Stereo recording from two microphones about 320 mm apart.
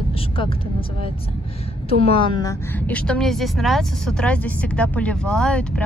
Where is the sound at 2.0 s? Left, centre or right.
Centre.